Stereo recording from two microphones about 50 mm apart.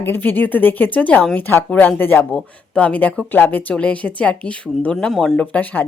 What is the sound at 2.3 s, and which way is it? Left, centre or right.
Speech, left.